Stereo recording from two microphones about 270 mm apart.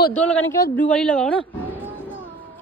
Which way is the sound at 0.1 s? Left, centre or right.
Centre.